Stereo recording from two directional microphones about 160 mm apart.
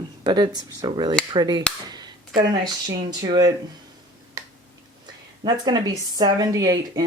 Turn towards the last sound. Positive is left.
turn(degrees=-25)  # may be behind; listen again after turning